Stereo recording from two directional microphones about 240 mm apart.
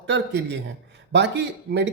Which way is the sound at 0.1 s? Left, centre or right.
Right.